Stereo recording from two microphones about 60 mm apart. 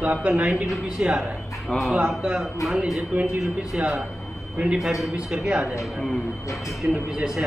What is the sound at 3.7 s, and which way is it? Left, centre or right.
Speech, centre.